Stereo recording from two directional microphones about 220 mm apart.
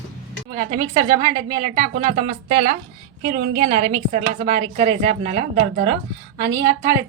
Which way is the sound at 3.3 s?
45° right (ahead or behind).